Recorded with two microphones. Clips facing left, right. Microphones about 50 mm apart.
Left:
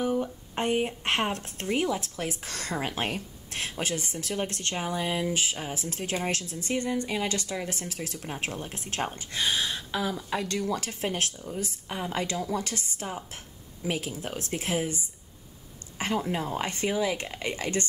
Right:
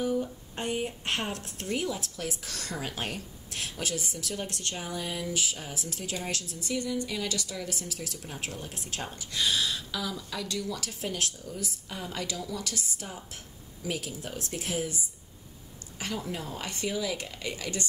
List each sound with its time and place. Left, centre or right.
0.0 s speech: left
16.0 s speech: left